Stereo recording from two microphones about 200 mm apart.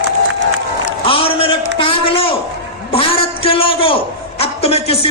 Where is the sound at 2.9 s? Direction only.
30° left (ahead or behind).